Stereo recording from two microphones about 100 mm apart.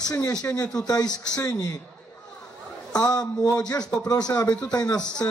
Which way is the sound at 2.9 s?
40° left (ahead or behind).